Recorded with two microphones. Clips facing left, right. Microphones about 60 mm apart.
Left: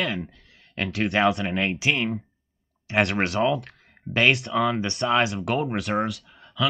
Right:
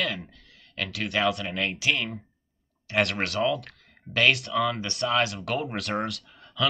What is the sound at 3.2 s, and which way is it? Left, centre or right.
Speech, left.